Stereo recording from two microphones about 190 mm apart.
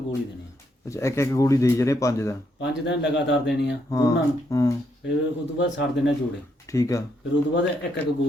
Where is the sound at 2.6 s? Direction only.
65° left (ahead or behind).